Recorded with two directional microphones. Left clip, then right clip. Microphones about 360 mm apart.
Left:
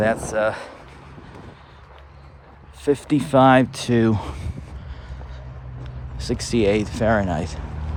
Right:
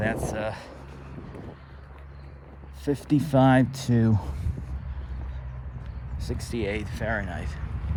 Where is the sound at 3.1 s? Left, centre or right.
Centre.